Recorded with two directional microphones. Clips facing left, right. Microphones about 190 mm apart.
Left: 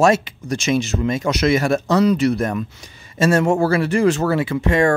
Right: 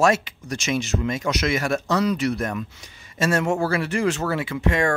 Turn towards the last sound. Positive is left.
turn(degrees=30)  # may be behind; listen again after turning